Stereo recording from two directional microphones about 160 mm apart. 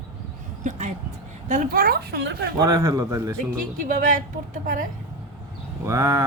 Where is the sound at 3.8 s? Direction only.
55° right (ahead or behind).